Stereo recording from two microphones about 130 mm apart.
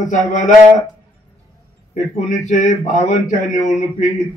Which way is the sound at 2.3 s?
70° left (ahead or behind).